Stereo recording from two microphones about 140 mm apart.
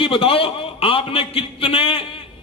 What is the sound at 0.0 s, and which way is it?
A man's voice, 40° left (ahead or behind).